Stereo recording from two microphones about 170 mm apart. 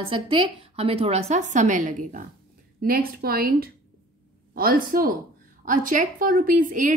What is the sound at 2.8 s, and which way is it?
A woman's voice, 60° right (ahead or behind).